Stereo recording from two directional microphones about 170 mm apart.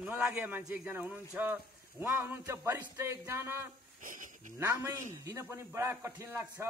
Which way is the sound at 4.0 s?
50° right (ahead or behind).